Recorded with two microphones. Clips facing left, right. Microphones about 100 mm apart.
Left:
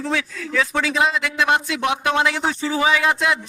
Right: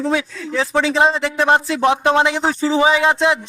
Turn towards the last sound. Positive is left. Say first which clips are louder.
# right 4 dB
turn(degrees=-25)  # may be behind; listen again after turning